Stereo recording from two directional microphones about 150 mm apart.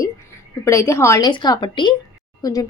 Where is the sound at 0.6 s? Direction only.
20° left (ahead or behind).